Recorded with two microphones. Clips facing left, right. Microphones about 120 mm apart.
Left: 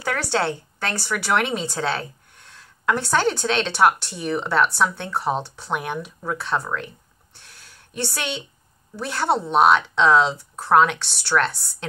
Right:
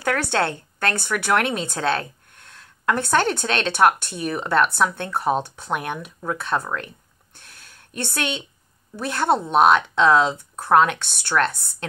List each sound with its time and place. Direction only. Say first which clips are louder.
0.0 s a woman's voice: right 1 dB; 55° right (ahead or behind)
7.3 s a sound: right 1 dB; 50° right (ahead or behind)
9.0 s a woman's voice: right 2 dB; 50° right (ahead or behind)